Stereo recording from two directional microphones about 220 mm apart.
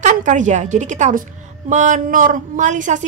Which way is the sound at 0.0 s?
35° right (ahead or behind).